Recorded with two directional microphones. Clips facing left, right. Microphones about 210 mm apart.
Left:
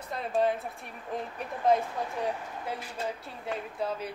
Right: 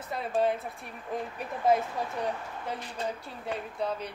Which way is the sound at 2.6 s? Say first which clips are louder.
Right 1 dB; 5° left (ahead or behind).